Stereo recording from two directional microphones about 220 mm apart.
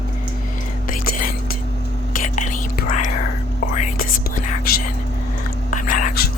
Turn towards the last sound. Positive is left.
turn(degrees=35)  # may be behind; listen again after turning